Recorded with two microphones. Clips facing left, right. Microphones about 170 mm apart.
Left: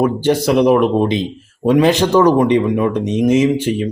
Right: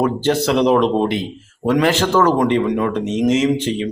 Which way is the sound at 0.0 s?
10° left (ahead or behind).